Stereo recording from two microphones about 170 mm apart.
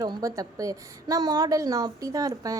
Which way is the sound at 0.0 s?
20° right (ahead or behind).